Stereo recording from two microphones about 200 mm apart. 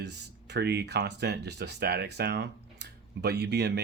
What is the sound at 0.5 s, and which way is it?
Speech, 55° right (ahead or behind).